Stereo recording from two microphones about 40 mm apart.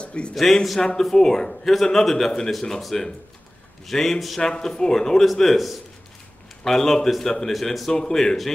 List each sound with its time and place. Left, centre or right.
0.0 s a sound: left
0.3 s a man's voice: centre
4.4 s a man's voice: centre
7.9 s a man's voice: centre